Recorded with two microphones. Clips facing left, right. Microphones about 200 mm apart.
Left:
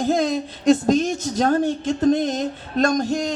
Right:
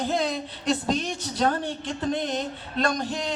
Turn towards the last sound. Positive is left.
turn(degrees=45)  # may be behind; listen again after turning